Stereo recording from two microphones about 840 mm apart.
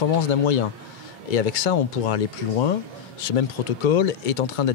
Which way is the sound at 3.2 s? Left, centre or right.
Left.